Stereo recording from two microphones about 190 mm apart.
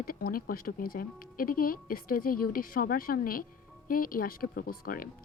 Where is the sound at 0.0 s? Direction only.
50° left (ahead or behind).